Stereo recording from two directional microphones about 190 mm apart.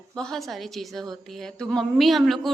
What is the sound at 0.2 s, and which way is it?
A woman's voice, centre (ahead or behind).